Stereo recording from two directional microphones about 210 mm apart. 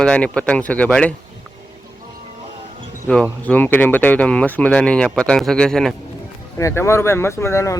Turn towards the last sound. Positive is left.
turn(degrees=15)  # may be behind; listen again after turning